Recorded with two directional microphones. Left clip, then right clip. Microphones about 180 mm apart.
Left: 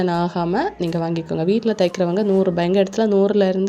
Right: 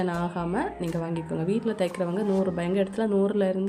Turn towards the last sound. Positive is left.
turn(degrees=40)  # may be behind; listen again after turning